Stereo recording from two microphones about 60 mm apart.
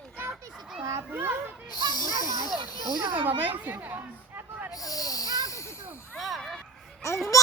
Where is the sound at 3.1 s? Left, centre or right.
Right.